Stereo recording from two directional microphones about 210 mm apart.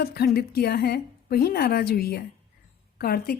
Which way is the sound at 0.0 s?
50° left (ahead or behind).